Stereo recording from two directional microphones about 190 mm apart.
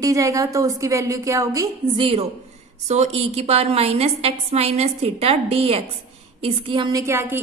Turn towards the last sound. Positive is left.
turn(degrees=-10)  # may be behind; listen again after turning